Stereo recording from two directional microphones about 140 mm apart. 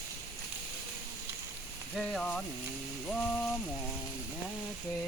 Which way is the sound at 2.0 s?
5° left (ahead or behind).